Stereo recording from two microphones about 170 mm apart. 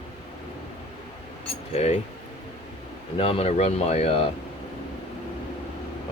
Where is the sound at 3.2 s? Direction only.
35° left (ahead or behind).